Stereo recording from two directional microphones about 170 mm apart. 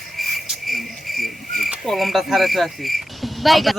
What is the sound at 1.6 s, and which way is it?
Speech, centre (ahead or behind).